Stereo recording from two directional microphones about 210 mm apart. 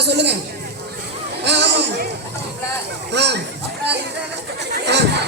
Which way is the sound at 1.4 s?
55° right (ahead or behind).